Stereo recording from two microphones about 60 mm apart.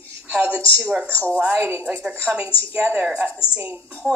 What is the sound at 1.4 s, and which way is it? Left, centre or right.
Speech, right.